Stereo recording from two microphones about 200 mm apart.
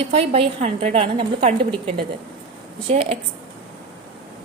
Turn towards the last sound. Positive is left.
turn(degrees=-30)  # may be behind; listen again after turning